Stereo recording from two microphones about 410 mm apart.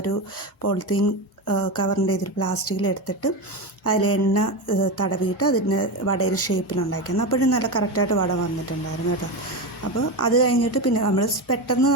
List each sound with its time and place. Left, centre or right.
0.9 s a woman's voice: left
9.8 s a woman's voice: left